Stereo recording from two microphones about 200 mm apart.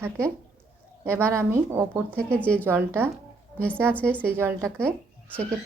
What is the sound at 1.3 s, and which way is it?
Speech, 15° right (ahead or behind).